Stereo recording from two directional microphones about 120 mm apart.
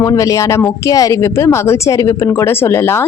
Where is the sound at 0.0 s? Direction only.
30° left (ahead or behind).